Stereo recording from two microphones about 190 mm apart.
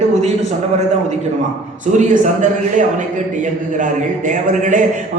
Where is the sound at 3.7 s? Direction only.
40° right (ahead or behind).